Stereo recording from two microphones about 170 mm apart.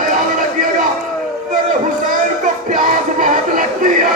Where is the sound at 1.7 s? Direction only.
50° right (ahead or behind).